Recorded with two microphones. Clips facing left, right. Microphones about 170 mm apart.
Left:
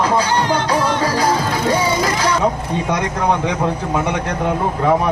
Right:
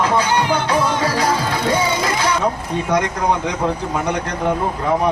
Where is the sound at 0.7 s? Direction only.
35° left (ahead or behind).